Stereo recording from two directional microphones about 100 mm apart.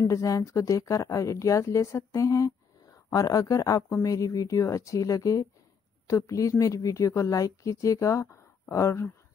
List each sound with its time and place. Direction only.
0.1 s speech: 30° left (ahead or behind)